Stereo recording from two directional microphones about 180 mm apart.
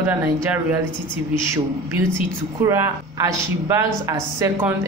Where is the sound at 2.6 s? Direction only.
15° right (ahead or behind).